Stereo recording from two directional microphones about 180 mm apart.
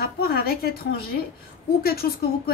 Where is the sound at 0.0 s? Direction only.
60° left (ahead or behind).